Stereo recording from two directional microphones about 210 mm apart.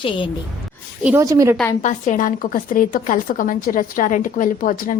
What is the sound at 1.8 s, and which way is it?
A woman's voice, 35° left (ahead or behind).